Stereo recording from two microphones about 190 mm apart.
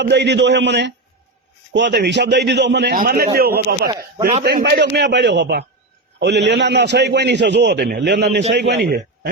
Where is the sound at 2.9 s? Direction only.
50° right (ahead or behind).